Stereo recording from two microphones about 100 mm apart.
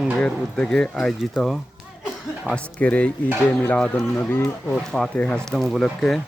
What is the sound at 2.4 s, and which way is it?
Speech, 10° left (ahead or behind).